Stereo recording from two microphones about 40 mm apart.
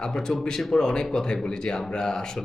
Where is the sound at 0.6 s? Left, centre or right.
Centre.